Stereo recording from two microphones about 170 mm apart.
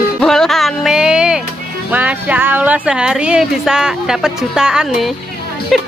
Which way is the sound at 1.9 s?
10° right (ahead or behind).